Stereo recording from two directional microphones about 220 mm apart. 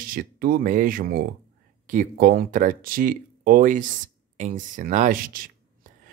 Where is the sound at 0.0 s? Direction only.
40° right (ahead or behind).